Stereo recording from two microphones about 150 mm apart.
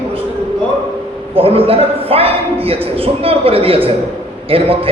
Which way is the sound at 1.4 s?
40° right (ahead or behind).